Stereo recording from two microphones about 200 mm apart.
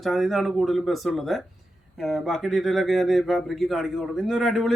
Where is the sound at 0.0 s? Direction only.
Centre (ahead or behind).